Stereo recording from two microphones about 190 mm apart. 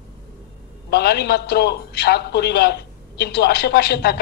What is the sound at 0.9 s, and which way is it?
A man's voice, 60° left (ahead or behind).